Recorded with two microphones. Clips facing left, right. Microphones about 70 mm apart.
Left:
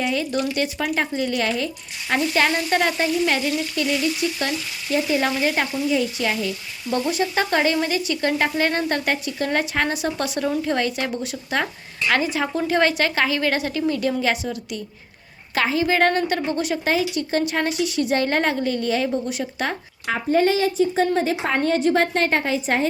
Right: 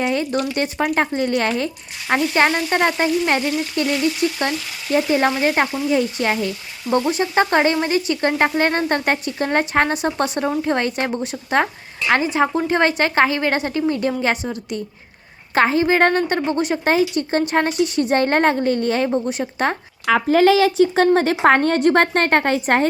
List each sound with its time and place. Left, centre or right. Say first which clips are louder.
0.0 s a woman's voice: right 3 dB; right
20.1 s speech: right 5 dB; right
21.2 s a woman's voice: right 6 dB; right